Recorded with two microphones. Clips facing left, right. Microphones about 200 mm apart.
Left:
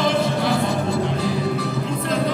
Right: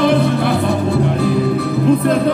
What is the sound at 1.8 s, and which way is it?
Music, 60° right (ahead or behind).